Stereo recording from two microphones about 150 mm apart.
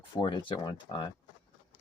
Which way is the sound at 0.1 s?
30° left (ahead or behind).